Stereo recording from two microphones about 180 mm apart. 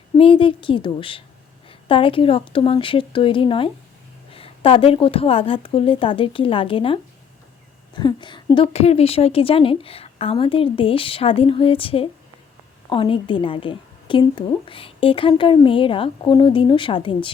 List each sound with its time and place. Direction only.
0.2 s a woman's voice: 30° left (ahead or behind)